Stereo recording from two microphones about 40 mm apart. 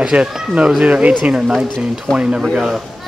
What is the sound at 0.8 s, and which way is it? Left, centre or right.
Speech, right.